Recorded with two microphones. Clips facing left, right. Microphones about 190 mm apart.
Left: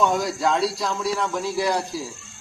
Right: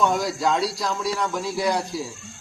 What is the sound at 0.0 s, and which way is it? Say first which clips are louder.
A man's voice: even; centre (ahead or behind).